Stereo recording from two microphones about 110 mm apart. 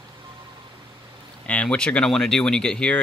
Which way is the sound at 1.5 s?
10° left (ahead or behind).